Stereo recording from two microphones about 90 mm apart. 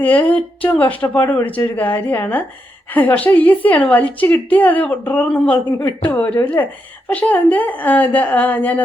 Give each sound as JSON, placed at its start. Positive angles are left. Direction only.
{"t": 0.0, "sound": "a woman's voice", "side_deg": 15}